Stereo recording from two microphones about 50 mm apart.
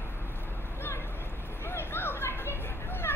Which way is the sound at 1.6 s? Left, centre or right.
Left.